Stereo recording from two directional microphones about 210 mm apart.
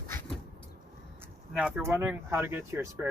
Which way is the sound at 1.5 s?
5° right (ahead or behind).